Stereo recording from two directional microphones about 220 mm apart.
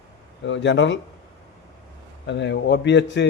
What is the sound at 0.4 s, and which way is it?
Speech, 55° left (ahead or behind).